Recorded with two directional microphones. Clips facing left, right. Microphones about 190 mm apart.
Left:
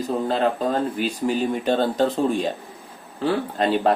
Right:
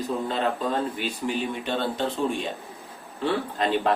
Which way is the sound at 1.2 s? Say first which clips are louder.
Left 7 dB; 40° left (ahead or behind).